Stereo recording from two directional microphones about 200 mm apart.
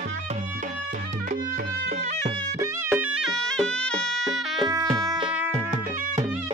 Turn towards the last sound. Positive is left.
turn(degrees=-20)  # may be behind; listen again after turning